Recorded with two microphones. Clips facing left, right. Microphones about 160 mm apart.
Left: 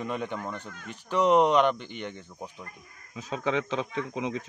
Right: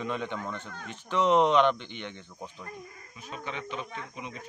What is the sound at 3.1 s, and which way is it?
A man's voice, 90° left.